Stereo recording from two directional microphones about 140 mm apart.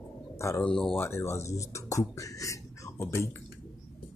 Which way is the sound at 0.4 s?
20° left (ahead or behind).